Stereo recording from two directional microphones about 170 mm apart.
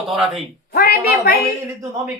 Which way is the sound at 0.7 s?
65° left (ahead or behind).